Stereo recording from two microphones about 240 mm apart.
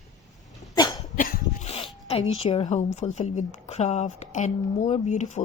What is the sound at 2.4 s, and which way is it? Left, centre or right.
A woman's voice, left.